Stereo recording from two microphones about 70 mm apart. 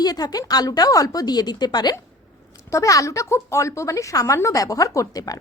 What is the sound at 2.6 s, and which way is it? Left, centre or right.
A woman's voice, left.